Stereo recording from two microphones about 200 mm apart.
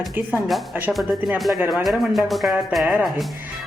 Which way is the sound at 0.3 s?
5° right (ahead or behind).